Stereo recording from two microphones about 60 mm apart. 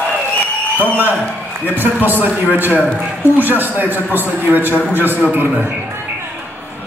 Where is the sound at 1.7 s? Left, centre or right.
Right.